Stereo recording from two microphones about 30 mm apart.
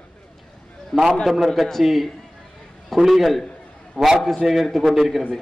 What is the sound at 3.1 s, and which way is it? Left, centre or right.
Speech, centre.